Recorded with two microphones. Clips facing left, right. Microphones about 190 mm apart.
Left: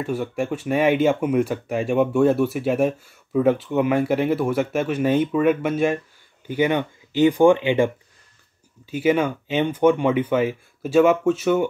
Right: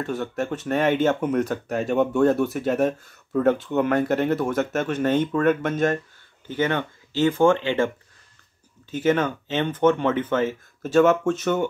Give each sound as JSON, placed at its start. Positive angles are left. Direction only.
{"t": 0.0, "sound": "speech", "side_deg": 10}
{"t": 8.9, "sound": "speech", "side_deg": 10}